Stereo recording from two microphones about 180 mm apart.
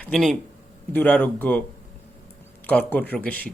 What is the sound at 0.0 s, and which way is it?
Speech, centre (ahead or behind).